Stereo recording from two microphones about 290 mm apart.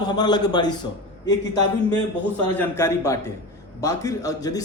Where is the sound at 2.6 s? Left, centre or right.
Centre.